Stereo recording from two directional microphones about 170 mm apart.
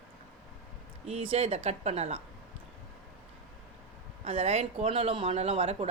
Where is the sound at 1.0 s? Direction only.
35° right (ahead or behind).